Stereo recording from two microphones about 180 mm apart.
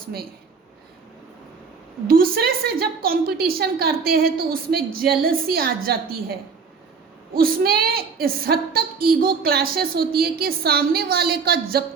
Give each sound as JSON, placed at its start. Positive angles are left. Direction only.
{"t": 0.0, "sound": "a woman's voice", "side_deg": -55}
{"t": 2.0, "sound": "a woman's voice", "side_deg": -55}
{"t": 7.3, "sound": "a woman's voice", "side_deg": -55}